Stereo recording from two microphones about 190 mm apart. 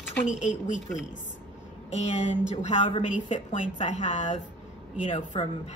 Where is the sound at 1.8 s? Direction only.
35° left (ahead or behind).